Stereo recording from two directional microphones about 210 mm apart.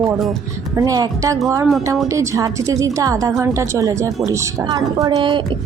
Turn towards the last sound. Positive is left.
turn(degrees=-20)  # may be behind; listen again after turning